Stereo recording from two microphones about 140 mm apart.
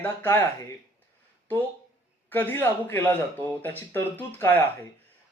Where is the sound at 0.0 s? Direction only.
15° left (ahead or behind).